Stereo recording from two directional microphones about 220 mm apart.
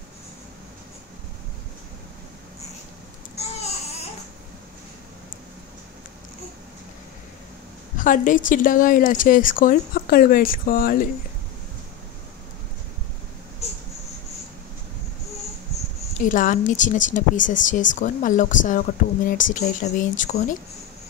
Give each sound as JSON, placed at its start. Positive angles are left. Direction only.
{"t": 3.4, "sound": "babbling", "side_deg": 30}
{"t": 8.0, "sound": "a woman's voice", "side_deg": 35}
{"t": 13.6, "sound": "a sound", "side_deg": 30}
{"t": 16.3, "sound": "speech", "side_deg": 35}